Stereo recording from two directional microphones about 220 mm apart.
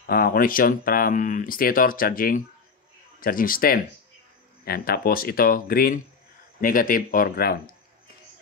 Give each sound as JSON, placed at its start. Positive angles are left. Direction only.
{"t": 0.0, "sound": "speech", "side_deg": 40}